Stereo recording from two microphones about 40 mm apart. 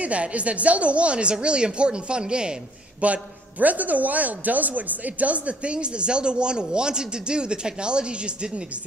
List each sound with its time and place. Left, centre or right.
0.0 s speech: right
3.0 s a man's voice: right